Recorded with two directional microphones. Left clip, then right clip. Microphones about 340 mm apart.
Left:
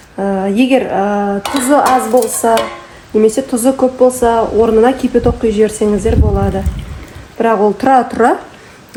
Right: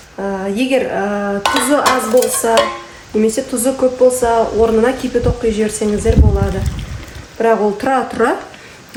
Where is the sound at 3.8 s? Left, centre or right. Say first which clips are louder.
Even; centre.